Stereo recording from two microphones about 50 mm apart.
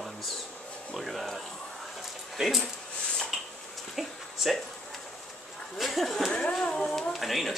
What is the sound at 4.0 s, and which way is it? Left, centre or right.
Speech, centre.